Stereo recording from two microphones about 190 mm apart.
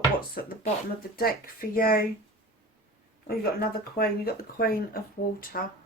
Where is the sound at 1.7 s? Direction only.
50° left (ahead or behind).